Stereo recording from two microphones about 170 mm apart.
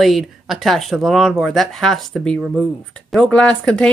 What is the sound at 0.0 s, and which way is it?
Speech, centre (ahead or behind).